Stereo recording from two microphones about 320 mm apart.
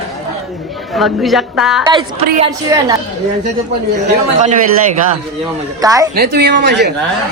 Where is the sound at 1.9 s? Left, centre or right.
Centre.